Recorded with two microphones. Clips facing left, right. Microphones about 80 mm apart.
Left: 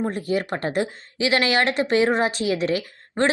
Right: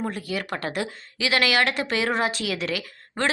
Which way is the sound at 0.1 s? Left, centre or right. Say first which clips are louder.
Left 5 dB; left.